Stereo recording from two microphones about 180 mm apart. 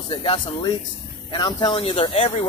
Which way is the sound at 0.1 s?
25° left (ahead or behind).